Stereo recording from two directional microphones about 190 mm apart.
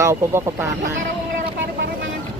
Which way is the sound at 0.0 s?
15° right (ahead or behind).